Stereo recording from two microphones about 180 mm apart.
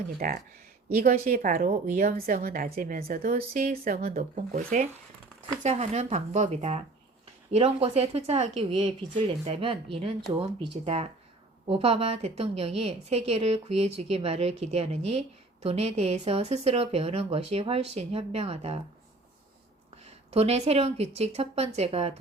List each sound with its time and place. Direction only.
0.2 s a woman's voice: 45° right (ahead or behind)
20.1 s a woman's voice: 35° right (ahead or behind)